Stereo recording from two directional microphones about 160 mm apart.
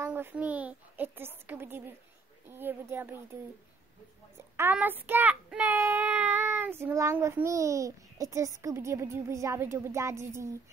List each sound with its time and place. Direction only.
0.0 s a child's voice: 10° right (ahead or behind)
4.6 s a child's voice: 10° right (ahead or behind)